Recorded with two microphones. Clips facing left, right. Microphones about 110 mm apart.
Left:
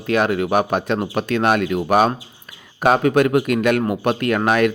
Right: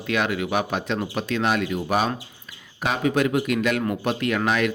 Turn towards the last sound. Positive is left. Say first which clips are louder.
# left 5 dB
turn(degrees=50)  # may be behind; listen again after turning